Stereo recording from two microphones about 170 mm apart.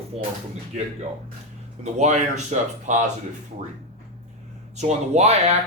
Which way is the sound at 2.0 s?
45° right (ahead or behind).